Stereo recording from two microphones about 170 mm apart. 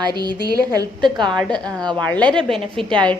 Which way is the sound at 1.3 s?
5° left (ahead or behind).